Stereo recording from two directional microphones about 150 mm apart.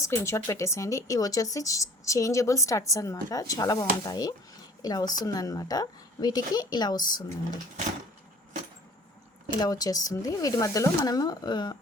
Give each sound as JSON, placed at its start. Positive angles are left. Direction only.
{"t": 0.0, "sound": "speech", "side_deg": 20}
{"t": 9.6, "sound": "speech", "side_deg": 25}